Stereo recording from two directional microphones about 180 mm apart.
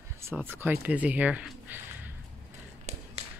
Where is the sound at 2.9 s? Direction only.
40° right (ahead or behind).